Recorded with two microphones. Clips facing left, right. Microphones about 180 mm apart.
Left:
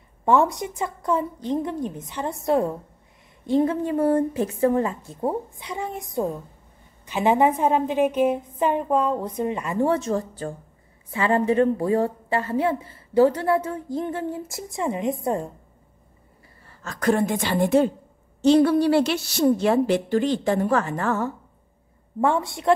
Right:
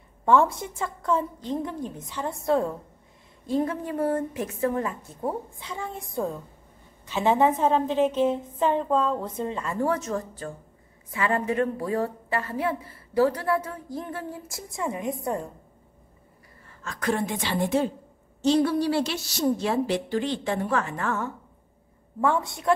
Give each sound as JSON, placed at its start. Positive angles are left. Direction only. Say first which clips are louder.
{"t": 0.2, "sound": "a woman's voice", "louder": "left 1 dB", "side_deg": 20}
{"t": 16.6, "sound": "a woman's voice", "louder": "left 6 dB", "side_deg": 40}